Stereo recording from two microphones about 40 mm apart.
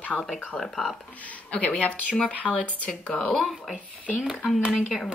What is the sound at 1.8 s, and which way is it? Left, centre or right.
Speech, left.